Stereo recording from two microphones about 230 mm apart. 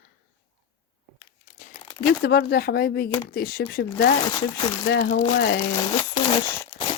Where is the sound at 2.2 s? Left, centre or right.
Left.